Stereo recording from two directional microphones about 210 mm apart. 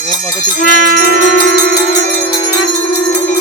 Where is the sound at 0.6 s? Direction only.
50° left (ahead or behind).